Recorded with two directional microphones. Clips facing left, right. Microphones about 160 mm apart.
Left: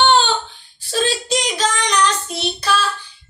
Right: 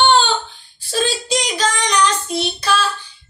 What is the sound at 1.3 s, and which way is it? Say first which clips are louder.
Child singing: even; centre (ahead or behind).